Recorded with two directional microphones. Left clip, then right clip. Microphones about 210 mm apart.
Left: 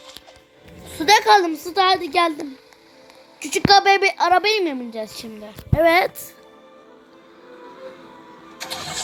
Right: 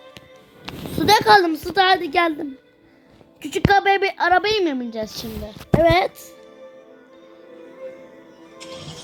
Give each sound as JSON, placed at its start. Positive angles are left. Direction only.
{"t": 0.9, "sound": "a woman's voice", "side_deg": 0}
{"t": 3.4, "sound": "a woman's voice", "side_deg": -5}
{"t": 8.5, "sound": "music", "side_deg": 50}